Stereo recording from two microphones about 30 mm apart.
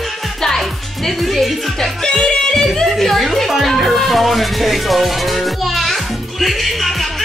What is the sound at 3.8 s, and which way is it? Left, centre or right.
Music, centre.